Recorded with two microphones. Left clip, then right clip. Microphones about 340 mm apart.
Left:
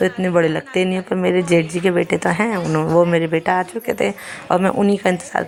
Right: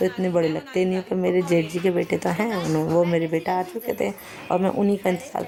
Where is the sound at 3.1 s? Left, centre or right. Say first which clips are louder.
Left 6 dB; right.